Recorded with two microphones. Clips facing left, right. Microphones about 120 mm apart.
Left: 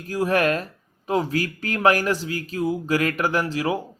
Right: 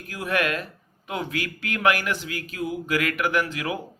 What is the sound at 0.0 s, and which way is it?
Speech, 35° left (ahead or behind).